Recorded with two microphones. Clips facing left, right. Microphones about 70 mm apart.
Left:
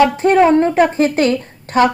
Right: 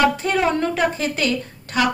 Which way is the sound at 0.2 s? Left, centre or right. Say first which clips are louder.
Left 9 dB; left.